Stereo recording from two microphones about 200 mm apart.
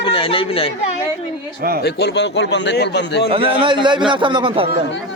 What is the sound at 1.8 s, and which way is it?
A man's voice, 55° left (ahead or behind).